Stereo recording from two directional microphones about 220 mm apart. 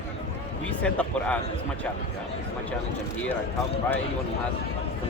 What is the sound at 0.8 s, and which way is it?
Speech, 5° left (ahead or behind).